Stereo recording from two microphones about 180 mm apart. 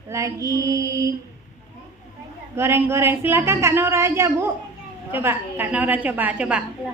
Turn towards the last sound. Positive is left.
turn(degrees=-5)  # may be behind; listen again after turning